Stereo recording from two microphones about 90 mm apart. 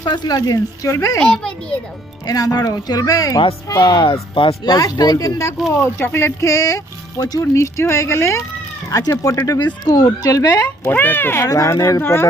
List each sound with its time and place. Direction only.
0.0 s speech: 55° left (ahead or behind); by 1.2 s 35° left (ahead or behind)
1.2 s a child's voice: 10° left (ahead or behind)
2.2 s speech: 45° left (ahead or behind)
4.0 s speech: 70° left (ahead or behind)
4.6 s speech: 45° left (ahead or behind)
10.8 s speech: 20° left (ahead or behind)
11.4 s speech: 40° left (ahead or behind)